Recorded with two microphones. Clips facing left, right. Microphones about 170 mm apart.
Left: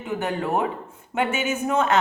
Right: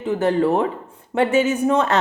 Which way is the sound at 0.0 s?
35° right (ahead or behind).